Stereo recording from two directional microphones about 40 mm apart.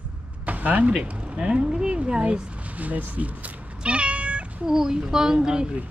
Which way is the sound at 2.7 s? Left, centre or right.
Right.